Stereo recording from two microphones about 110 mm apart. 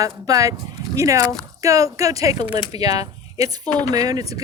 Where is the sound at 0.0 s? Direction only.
30° right (ahead or behind).